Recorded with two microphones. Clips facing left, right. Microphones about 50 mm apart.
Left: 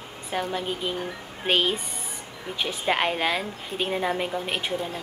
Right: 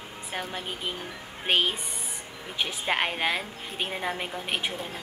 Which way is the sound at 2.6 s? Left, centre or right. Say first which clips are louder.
Left 3 dB; centre.